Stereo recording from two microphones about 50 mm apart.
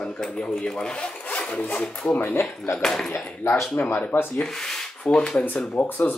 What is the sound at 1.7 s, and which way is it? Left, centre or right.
Speech, centre.